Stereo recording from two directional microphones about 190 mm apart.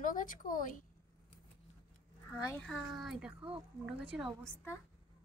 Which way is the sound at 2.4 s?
10° left (ahead or behind).